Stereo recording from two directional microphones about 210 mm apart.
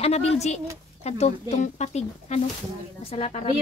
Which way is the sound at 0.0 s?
30° left (ahead or behind).